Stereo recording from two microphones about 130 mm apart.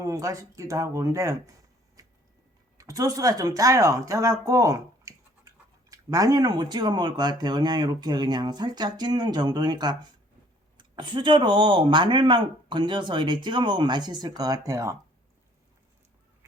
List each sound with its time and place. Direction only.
0.0 s speech: 25° right (ahead or behind)
2.0 s a sound: 25° right (ahead or behind)
2.7 s speech: 25° right (ahead or behind)